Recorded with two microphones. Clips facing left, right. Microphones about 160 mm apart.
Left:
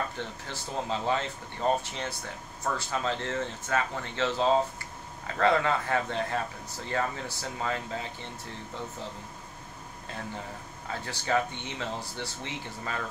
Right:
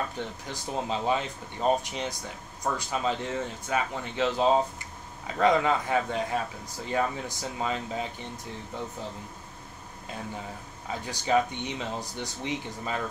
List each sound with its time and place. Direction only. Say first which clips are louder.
0.5 s speech: right 1 dB; 15° right (ahead or behind)
10.9 s speech: right 3 dB; 15° right (ahead or behind)